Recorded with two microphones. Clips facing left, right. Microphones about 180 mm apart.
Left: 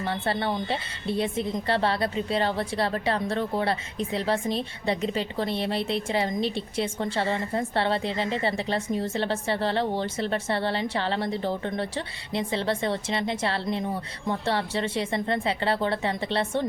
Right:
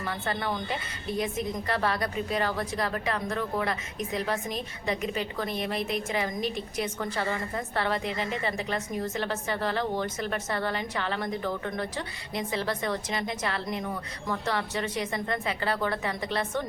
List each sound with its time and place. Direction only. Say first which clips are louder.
0.0 s a woman's voice: left 4 dB; 30° left (ahead or behind)